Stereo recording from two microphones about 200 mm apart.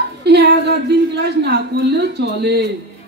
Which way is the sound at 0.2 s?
55° right (ahead or behind).